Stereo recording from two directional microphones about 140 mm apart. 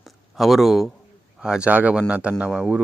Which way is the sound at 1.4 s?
5° right (ahead or behind).